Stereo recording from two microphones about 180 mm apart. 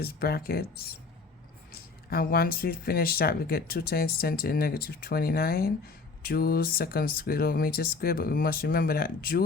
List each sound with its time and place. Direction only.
0.0 s speech: 55° left (ahead or behind)